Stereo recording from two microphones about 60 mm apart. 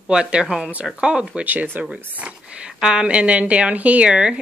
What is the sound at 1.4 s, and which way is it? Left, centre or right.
Speech, right.